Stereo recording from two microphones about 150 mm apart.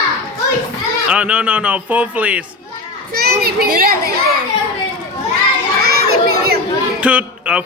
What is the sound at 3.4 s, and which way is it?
Speech, 80° right.